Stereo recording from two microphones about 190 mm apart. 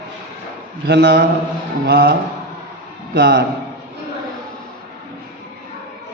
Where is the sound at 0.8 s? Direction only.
60° right (ahead or behind).